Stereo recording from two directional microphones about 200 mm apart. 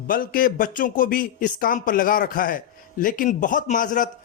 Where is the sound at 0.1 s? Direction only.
45° left (ahead or behind).